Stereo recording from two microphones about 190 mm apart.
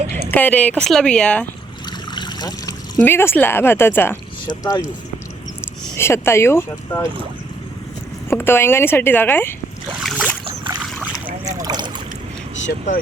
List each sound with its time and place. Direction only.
0.3 s speech: 10° left (ahead or behind)
1.9 s trickle: 25° left (ahead or behind)
3.0 s speech: 10° left (ahead or behind)
6.0 s speech: 15° left (ahead or behind)
8.3 s speech: 10° left (ahead or behind)
10.0 s boat: centre (ahead or behind)
10.4 s boat: 25° right (ahead or behind)
10.8 s boat: 5° right (ahead or behind)
11.4 s boat: 20° right (ahead or behind)